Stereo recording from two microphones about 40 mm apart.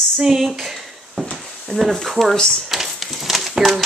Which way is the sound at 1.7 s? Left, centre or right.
Centre.